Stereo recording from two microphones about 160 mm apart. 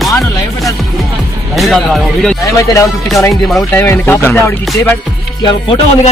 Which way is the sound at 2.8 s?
20° left (ahead or behind).